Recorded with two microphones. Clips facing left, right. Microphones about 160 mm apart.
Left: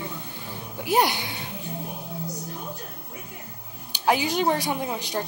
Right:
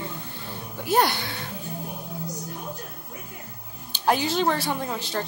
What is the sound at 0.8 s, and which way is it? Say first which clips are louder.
Speech: even; 15° left (ahead or behind).